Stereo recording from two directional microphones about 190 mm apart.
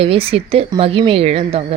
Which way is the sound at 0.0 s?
30° right (ahead or behind).